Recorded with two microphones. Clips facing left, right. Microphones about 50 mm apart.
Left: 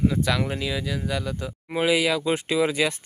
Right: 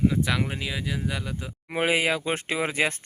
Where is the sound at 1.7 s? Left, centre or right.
Right.